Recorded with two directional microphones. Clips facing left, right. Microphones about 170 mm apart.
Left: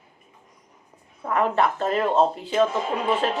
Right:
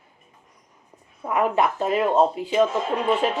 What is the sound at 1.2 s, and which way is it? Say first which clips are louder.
Speech: right 1 dB; 10° right (ahead or behind).